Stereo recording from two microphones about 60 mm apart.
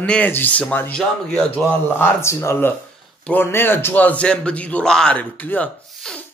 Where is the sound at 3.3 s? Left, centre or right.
Left.